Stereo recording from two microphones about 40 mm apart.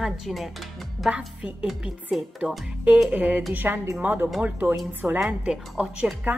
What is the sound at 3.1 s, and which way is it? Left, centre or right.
Speech, right.